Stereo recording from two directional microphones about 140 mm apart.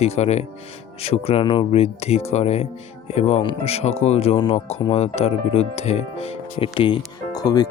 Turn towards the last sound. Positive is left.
turn(degrees=30)  # may be behind; listen again after turning